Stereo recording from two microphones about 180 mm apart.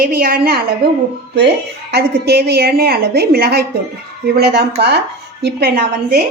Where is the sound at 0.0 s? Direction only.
55° right (ahead or behind).